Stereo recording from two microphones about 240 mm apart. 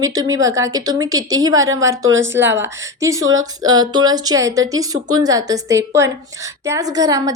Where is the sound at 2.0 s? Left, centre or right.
Right.